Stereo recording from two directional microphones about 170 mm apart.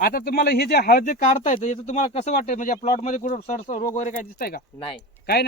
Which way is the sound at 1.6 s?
45° left (ahead or behind).